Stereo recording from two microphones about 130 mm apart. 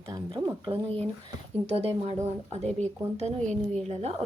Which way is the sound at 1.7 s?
50° right (ahead or behind).